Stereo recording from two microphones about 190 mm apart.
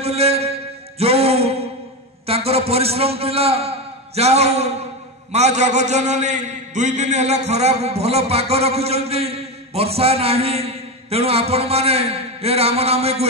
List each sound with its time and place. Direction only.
0.0 s mantra: 35° right (ahead or behind)
2.2 s a man's voice: 30° right (ahead or behind)